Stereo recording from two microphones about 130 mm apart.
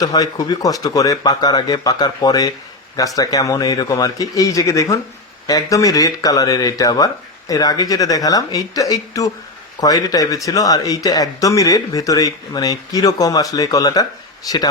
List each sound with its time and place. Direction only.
0.0 s speech: 30° left (ahead or behind)